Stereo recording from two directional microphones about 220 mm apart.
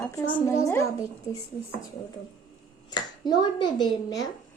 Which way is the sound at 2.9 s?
20° left (ahead or behind).